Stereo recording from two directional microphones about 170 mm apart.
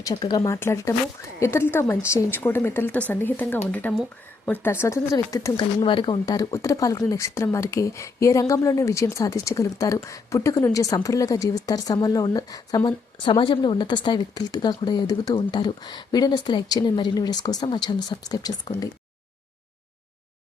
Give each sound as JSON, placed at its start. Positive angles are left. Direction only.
{"t": 0.0, "sound": "a woman's voice", "side_deg": 25}
{"t": 5.8, "sound": "speech", "side_deg": 30}